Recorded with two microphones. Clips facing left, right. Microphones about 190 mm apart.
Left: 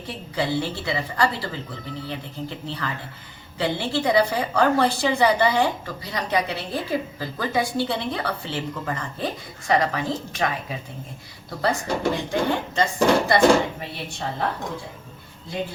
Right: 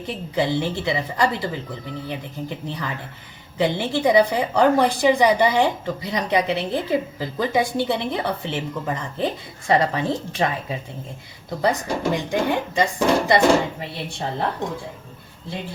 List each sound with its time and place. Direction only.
0.3 s a woman's voice: 20° right (ahead or behind)
11.6 s speech: 15° right (ahead or behind)